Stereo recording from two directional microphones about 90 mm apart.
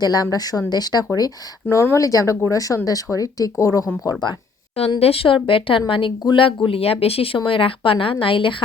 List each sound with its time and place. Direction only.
0.0 s speech: 45° left (ahead or behind)
1.7 s speech: 35° left (ahead or behind)
4.0 s speech: 55° left (ahead or behind)
4.9 s speech: 90° left; by 8.5 s 75° left (ahead or behind)